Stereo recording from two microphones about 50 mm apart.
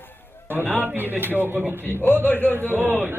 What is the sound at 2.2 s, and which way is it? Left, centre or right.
Speech, left.